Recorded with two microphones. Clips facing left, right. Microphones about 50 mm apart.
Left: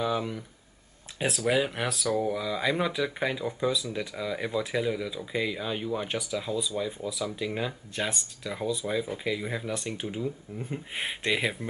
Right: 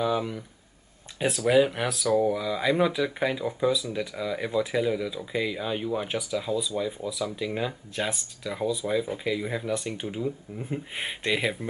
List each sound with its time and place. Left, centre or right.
0.0 s speech: centre